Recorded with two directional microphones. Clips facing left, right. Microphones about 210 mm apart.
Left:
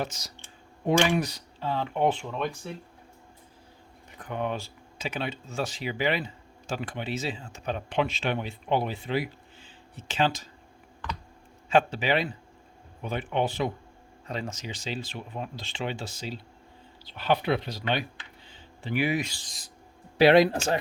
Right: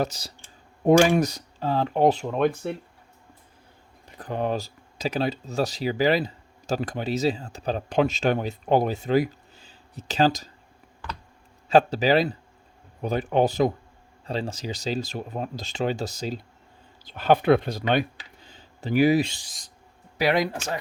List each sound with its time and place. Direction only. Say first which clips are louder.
0.0 s speech: right 6 dB; 35° right (ahead or behind)
4.2 s speech: right 4 dB; 35° right (ahead or behind)
11.7 s speech: right 5 dB; 40° right (ahead or behind)
20.1 s speech: left 5 dB; 30° left (ahead or behind)